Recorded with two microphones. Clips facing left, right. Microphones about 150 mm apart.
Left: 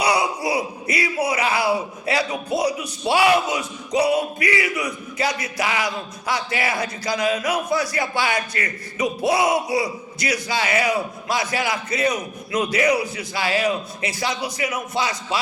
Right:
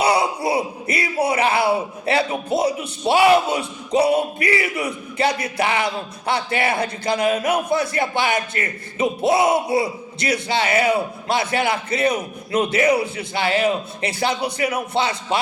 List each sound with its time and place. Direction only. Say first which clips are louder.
0.0 s speech: right 2 dB; 30° right (ahead or behind)